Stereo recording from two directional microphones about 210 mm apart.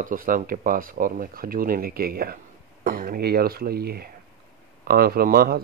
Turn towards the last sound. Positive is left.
turn(degrees=-45)  # may be behind; listen again after turning